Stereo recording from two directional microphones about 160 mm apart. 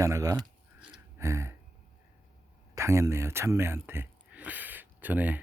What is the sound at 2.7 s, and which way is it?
Speech, 15° right (ahead or behind).